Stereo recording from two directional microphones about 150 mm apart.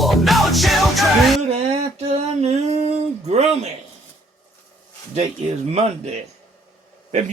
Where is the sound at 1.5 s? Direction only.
45° right (ahead or behind).